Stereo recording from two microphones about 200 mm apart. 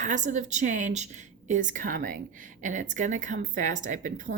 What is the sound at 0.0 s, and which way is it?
A woman's voice, 40° right (ahead or behind).